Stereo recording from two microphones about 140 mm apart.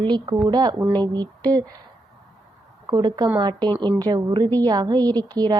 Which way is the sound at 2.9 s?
30° right (ahead or behind).